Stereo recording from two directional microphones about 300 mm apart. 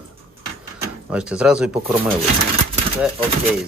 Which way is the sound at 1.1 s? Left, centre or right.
Centre.